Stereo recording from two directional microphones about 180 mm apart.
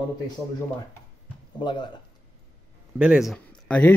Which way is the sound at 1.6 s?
25° left (ahead or behind).